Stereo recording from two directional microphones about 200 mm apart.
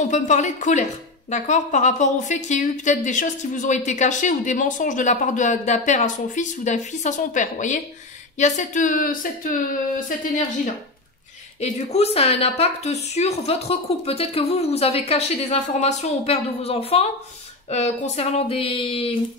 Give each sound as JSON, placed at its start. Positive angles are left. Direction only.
{"t": 0.1, "sound": "a woman's voice", "side_deg": 35}